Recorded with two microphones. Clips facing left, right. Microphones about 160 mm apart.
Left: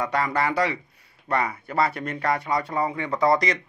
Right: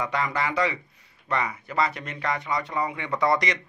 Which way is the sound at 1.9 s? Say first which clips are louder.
Left 5 dB; 55° left (ahead or behind).